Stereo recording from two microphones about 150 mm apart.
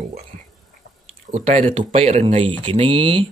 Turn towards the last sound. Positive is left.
turn(degrees=-35)  # may be behind; listen again after turning